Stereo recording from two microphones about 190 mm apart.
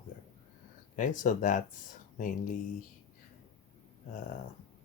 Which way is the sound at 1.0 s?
40° left (ahead or behind).